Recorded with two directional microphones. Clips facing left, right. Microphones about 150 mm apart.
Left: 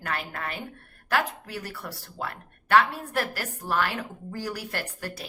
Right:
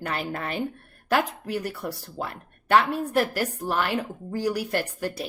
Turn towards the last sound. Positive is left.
turn(degrees=-15)  # may be behind; listen again after turning